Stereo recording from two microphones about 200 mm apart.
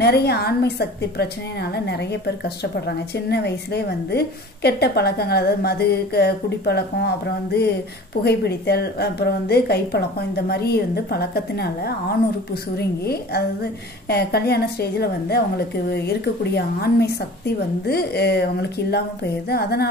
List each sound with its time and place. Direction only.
0.0 s a woman's voice: 55° left (ahead or behind)
8.2 s a woman's voice: 55° left (ahead or behind)